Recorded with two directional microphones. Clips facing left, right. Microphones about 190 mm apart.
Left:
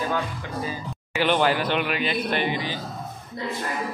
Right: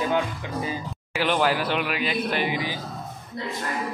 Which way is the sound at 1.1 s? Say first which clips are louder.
Left 1 dB; 5° right (ahead or behind).